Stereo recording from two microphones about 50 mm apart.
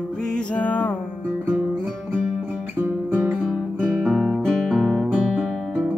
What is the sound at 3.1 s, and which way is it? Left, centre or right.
Music, right.